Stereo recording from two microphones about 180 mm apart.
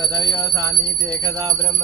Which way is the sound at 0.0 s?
25° right (ahead or behind).